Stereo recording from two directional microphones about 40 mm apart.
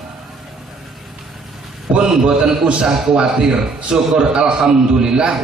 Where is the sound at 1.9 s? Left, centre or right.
Right.